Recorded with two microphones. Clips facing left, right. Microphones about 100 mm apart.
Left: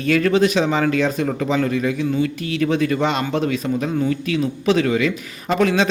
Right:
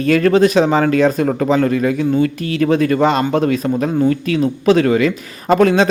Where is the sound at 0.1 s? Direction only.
45° right (ahead or behind).